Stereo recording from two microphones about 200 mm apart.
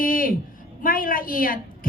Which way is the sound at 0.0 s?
45° left (ahead or behind).